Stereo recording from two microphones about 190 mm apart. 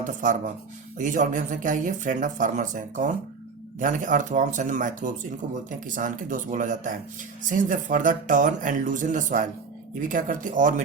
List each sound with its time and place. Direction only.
0.0 s speech: 45° right (ahead or behind)